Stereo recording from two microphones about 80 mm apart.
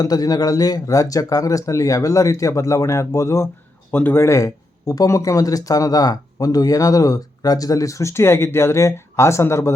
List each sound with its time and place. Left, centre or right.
0.0 s speech: left